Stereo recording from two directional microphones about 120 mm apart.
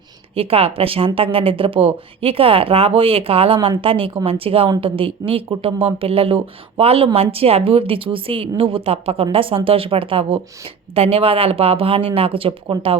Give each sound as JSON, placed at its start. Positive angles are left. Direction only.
{"t": 0.3, "sound": "speech", "side_deg": -55}